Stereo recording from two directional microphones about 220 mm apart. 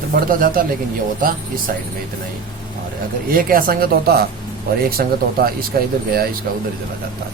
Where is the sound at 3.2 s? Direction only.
40° right (ahead or behind).